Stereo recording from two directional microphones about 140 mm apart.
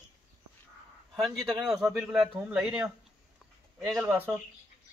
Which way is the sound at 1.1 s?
5° right (ahead or behind).